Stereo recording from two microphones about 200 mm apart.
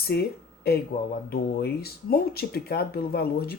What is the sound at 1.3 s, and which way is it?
Speech, 50° left (ahead or behind).